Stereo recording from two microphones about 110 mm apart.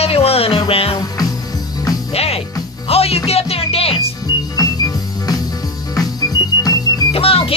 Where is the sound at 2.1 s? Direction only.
65° left (ahead or behind).